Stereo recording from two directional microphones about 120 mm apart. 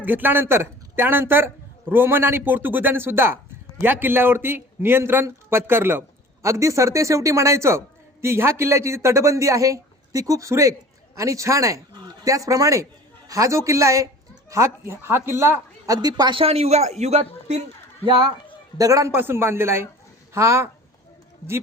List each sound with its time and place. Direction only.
0.0 s a man's voice: 15° right (ahead or behind)
16.0 s speech: 35° right (ahead or behind)
16.4 s a man's voice: 60° right (ahead or behind)
18.0 s speech: 45° right (ahead or behind)
18.8 s a man's voice: 30° right (ahead or behind)